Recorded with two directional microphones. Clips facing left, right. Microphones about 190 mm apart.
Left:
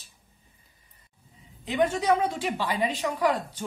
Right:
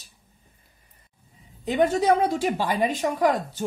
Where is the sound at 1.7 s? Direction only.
40° right (ahead or behind).